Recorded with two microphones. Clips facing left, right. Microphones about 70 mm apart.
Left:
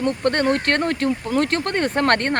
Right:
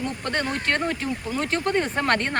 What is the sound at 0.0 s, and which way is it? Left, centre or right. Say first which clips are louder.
Speech: left 7 dB; left.